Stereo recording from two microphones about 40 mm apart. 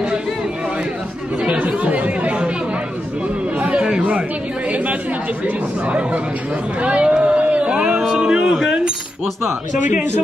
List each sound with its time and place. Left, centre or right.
1.6 s chatter: right
3.5 s chatter: right
6.8 s speech: right
7.2 s a sound: right
8.2 s speech: right